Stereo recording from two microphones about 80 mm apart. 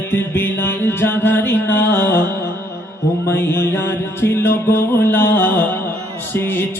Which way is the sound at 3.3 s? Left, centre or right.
Left.